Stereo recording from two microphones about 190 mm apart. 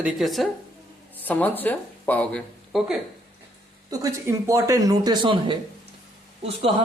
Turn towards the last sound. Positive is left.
turn(degrees=-30)  # may be behind; listen again after turning